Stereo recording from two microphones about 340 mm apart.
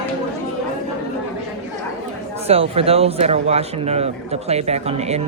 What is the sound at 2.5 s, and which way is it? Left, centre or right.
Speech, centre.